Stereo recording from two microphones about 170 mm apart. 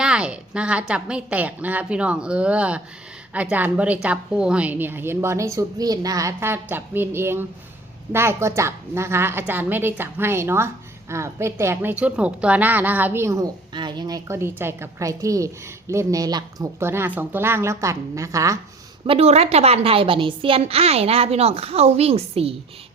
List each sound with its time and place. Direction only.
0.0 s a woman's voice: 5° right (ahead or behind)
19.0 s a woman's voice: 35° right (ahead or behind)